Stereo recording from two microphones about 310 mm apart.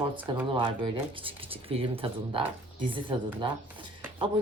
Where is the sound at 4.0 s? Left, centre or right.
Centre.